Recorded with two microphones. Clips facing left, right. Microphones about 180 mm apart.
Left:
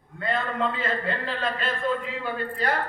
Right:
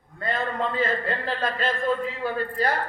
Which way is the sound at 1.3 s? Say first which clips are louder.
Right 2 dB; 40° right (ahead or behind).